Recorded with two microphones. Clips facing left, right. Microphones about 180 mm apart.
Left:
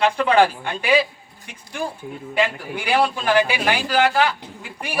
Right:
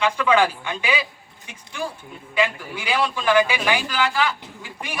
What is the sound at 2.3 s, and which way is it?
Speech, 55° left (ahead or behind).